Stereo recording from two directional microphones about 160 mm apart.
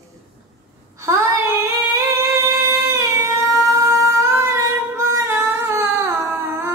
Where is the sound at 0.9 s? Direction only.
15° right (ahead or behind).